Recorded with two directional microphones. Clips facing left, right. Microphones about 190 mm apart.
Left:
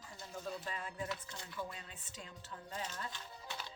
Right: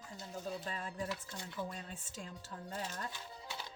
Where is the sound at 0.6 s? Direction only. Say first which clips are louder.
Right 2 dB; 35° right (ahead or behind).